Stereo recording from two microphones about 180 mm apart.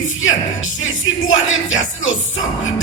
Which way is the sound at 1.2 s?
90° left.